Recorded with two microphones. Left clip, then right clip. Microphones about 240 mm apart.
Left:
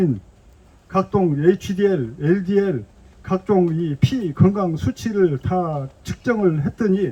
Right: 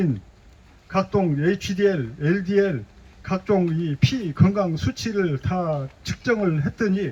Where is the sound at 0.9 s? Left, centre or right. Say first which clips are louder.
Left 3 dB; centre.